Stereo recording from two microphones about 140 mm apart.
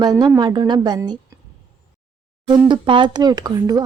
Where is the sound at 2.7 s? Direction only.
35° right (ahead or behind).